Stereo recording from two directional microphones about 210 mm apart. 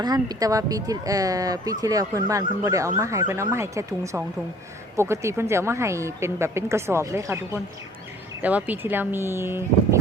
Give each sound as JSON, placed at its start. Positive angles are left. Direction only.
{"t": 0.0, "sound": "speech", "side_deg": -20}